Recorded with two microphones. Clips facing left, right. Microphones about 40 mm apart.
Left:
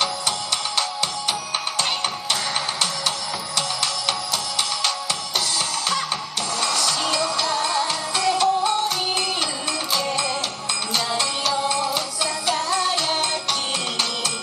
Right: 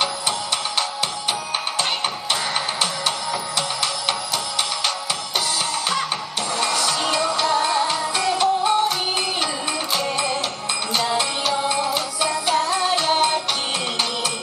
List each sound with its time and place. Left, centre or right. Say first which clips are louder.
6.6 s music: right 1 dB; right
9.9 s music: right 1 dB; centre